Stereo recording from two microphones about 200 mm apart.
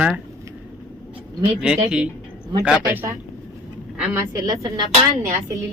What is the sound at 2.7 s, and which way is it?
A woman's voice, 10° right (ahead or behind).